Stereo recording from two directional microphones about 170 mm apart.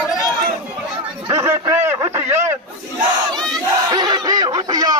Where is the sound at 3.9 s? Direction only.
25° right (ahead or behind).